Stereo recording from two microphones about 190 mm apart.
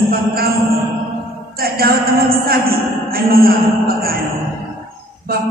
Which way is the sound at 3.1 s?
50° right (ahead or behind).